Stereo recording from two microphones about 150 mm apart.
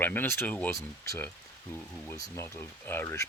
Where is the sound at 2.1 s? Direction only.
20° left (ahead or behind).